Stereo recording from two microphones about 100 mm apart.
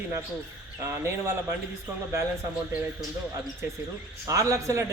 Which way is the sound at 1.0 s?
25° right (ahead or behind).